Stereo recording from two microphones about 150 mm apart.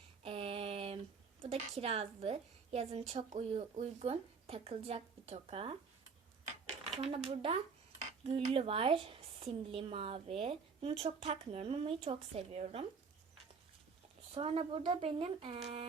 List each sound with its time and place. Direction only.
0.2 s a sound: 35° right (ahead or behind)
1.4 s a woman's voice: 45° right (ahead or behind)
7.0 s speech: 40° right (ahead or behind)
14.3 s speech: 40° right (ahead or behind)